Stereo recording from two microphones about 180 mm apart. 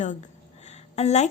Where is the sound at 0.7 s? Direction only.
40° left (ahead or behind).